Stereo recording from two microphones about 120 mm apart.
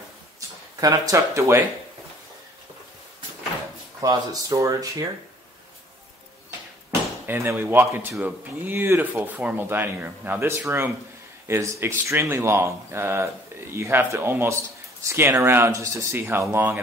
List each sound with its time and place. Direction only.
0.7 s speech: 30° right (ahead or behind)
4.0 s speech: 30° right (ahead or behind)
7.2 s speech: 15° right (ahead or behind)